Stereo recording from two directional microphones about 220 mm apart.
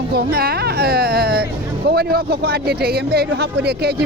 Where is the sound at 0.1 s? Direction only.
45° right (ahead or behind).